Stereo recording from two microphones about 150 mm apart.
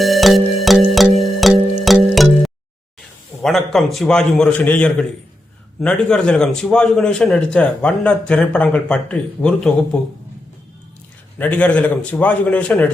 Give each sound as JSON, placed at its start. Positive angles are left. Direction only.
{"t": 0.0, "sound": "music", "side_deg": 0}
{"t": 3.4, "sound": "a man's voice", "side_deg": 0}
{"t": 11.3, "sound": "a man's voice", "side_deg": 10}